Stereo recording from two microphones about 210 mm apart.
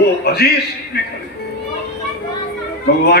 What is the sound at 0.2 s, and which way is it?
Speech, 50° left (ahead or behind).